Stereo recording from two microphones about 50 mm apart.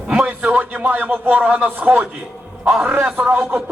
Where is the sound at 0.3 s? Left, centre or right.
Right.